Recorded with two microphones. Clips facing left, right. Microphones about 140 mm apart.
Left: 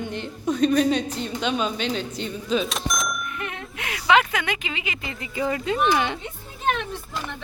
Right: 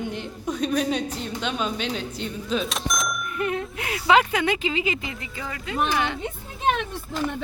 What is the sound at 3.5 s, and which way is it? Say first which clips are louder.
Speech: right 5 dB; 35° right (ahead or behind).